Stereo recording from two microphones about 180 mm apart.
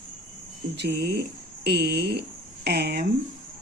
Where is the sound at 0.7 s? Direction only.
65° right (ahead or behind).